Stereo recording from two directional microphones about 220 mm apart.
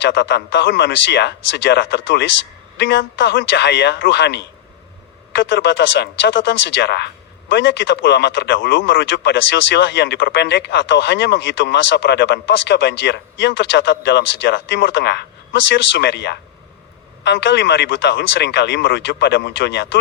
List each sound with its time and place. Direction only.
0.0 s speech: 55° left (ahead or behind)